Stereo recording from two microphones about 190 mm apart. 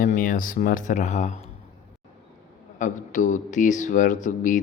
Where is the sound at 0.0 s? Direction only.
45° left (ahead or behind).